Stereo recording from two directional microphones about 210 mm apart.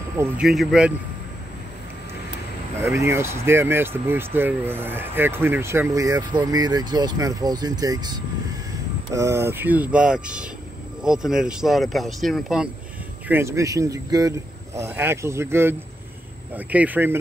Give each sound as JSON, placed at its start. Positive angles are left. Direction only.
{"t": 0.2, "sound": "speech", "side_deg": 0}
{"t": 2.8, "sound": "speech", "side_deg": -15}
{"t": 13.3, "sound": "speech", "side_deg": -10}